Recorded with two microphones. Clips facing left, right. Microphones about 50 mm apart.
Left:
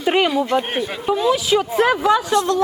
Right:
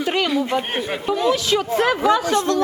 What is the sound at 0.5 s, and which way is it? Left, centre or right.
Speech, centre.